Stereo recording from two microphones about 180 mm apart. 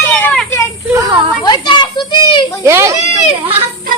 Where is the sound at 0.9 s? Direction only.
20° right (ahead or behind).